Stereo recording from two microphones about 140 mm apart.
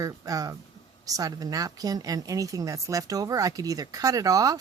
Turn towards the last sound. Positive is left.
turn(degrees=-25)  # may be behind; listen again after turning